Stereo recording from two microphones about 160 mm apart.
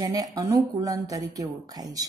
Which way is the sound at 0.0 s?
25° right (ahead or behind).